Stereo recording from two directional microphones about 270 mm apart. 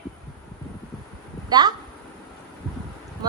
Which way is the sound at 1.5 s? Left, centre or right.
Centre.